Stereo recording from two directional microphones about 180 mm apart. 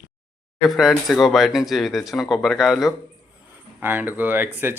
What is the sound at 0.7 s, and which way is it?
Speech, centre (ahead or behind).